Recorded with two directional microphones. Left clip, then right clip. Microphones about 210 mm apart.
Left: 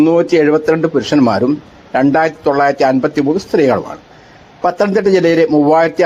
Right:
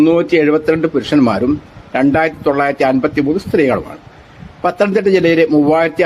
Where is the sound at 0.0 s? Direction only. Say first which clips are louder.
Left 1 dB; 10° right (ahead or behind).